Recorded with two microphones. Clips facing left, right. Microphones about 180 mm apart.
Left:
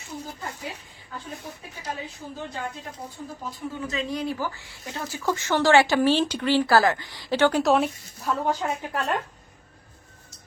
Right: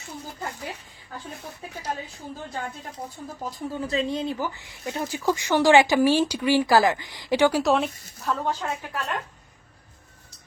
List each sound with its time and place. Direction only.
3.4 s speech: 35° right (ahead or behind); by 7.6 s 10° right (ahead or behind)
7.6 s speech: centre (ahead or behind)
8.3 s a woman's voice: 15° left (ahead or behind)
8.9 s a woman's voice: 35° left (ahead or behind)